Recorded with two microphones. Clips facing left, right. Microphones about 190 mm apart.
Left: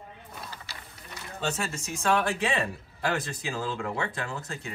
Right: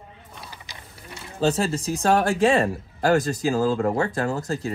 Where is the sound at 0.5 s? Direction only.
15° right (ahead or behind).